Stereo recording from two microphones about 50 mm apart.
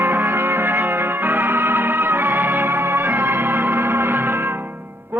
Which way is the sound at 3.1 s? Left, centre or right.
Right.